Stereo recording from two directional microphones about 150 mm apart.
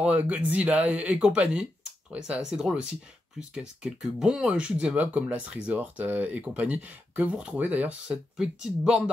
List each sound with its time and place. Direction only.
0.0 s speech: 10° right (ahead or behind)